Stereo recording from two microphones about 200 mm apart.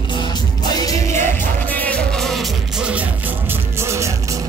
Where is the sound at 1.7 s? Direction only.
5° left (ahead or behind).